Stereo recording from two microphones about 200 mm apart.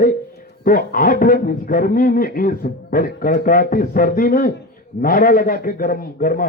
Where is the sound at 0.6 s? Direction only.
45° left (ahead or behind).